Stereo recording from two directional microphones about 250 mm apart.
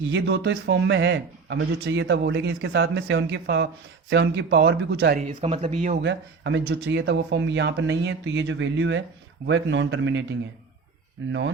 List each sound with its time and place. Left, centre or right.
0.1 s a man's voice: right
6.0 s a man's voice: right
11.3 s a man's voice: right